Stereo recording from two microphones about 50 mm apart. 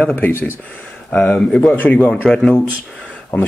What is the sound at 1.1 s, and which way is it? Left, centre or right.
Speech, left.